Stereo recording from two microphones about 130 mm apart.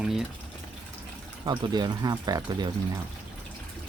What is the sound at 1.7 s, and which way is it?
Speech, 30° right (ahead or behind).